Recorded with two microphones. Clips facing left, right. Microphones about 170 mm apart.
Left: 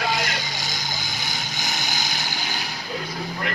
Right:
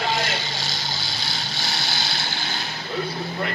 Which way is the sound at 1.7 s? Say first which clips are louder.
Even; 15° left (ahead or behind).